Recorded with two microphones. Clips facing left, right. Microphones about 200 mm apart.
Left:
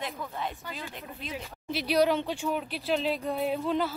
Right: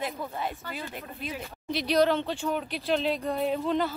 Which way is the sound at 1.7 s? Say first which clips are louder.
Right 1 dB; 5° left (ahead or behind).